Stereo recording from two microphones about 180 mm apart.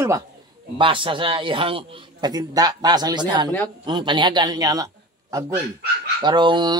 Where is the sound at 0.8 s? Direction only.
30° right (ahead or behind).